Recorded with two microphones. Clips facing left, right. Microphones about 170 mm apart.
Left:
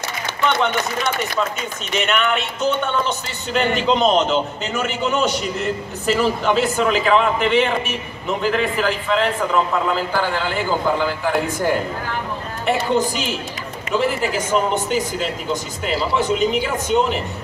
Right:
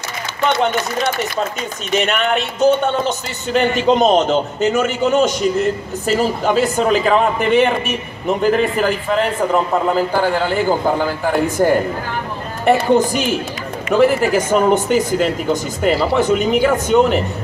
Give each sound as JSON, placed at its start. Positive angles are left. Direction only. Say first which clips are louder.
{"t": 0.6, "sound": "speech", "louder": "right 3 dB", "side_deg": -45}